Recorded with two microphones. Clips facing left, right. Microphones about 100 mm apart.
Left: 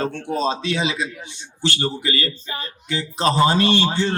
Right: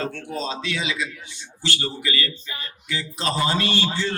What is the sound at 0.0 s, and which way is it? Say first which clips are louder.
A man's voice: left 6 dB; 25° left (ahead or behind).